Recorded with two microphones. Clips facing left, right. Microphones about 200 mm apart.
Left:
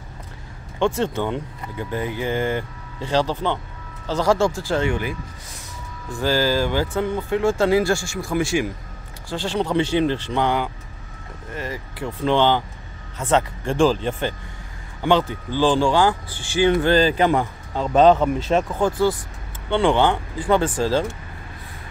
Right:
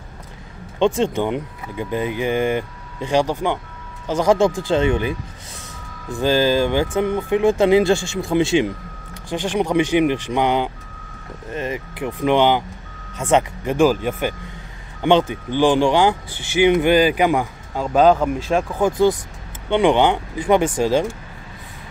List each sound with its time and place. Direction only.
0.7 s speech: 15° right (ahead or behind)
6.2 s speech: 20° right (ahead or behind)
15.0 s speech: 20° right (ahead or behind); by 18.8 s centre (ahead or behind)
18.8 s speech: 15° right (ahead or behind)